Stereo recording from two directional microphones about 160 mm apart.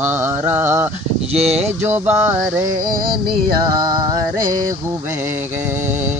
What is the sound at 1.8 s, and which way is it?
Music, 15° right (ahead or behind).